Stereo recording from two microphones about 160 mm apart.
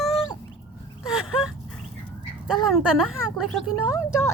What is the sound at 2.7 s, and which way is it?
Speech, 5° right (ahead or behind).